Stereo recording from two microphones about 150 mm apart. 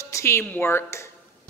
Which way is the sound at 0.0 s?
20° left (ahead or behind).